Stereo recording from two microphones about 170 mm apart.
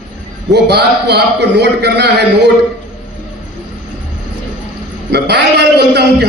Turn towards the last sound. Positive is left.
turn(degrees=-75)  # may be behind; listen again after turning